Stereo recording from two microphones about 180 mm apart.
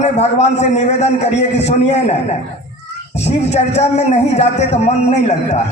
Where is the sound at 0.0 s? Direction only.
40° left (ahead or behind).